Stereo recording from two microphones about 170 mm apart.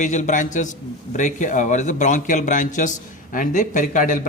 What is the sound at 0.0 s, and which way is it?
Speech, 45° left (ahead or behind).